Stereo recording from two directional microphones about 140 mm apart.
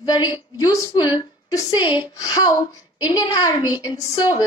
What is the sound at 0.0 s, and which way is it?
Speech, 30° left (ahead or behind).